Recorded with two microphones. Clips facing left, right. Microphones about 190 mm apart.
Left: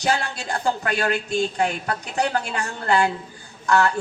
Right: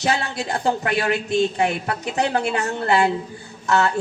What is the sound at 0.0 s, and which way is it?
A woman's voice, 25° right (ahead or behind).